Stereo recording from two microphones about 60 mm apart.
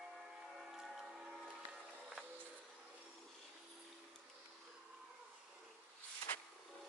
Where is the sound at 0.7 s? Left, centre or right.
Centre.